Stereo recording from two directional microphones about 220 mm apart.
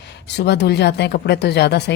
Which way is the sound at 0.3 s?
50° left (ahead or behind).